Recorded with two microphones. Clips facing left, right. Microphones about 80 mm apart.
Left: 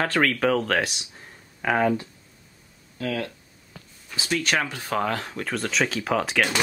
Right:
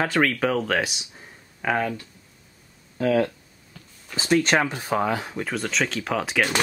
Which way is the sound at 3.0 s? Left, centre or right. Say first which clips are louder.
Right 8 dB; right.